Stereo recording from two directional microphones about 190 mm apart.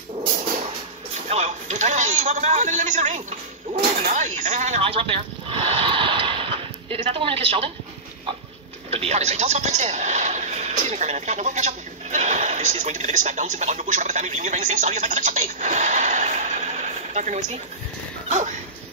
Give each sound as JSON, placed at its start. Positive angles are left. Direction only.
{"t": 1.3, "sound": "a man's voice", "side_deg": -35}
{"t": 8.9, "sound": "a man's voice", "side_deg": -35}